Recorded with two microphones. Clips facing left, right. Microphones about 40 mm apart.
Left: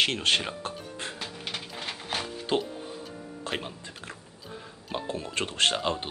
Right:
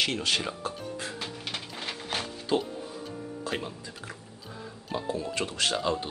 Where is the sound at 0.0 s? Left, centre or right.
Left.